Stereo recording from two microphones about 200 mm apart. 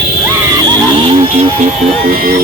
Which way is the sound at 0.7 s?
25° right (ahead or behind).